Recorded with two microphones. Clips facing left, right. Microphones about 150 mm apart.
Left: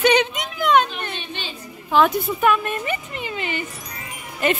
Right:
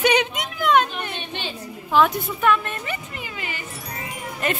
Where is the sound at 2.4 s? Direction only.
10° left (ahead or behind).